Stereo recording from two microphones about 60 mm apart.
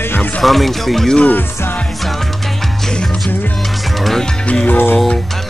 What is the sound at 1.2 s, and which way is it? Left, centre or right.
Music, left.